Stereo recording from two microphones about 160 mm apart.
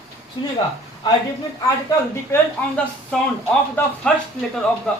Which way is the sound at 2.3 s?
5° left (ahead or behind).